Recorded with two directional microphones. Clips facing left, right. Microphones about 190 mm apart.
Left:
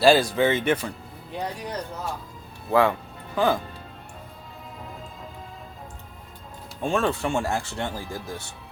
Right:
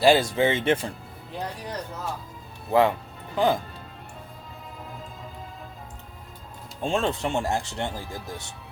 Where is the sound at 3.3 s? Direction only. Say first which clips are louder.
Even; 20° right (ahead or behind).